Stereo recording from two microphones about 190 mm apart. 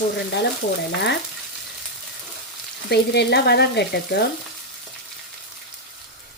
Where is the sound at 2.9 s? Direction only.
60° left (ahead or behind).